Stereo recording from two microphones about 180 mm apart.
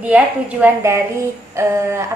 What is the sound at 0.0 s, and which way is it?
A woman's voice, 10° right (ahead or behind).